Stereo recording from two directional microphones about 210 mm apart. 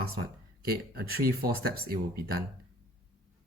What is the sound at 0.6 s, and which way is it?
Speech, 45° right (ahead or behind).